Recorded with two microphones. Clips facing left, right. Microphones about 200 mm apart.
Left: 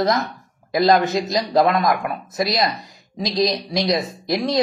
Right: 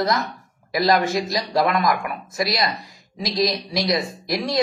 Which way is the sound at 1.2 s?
20° left (ahead or behind).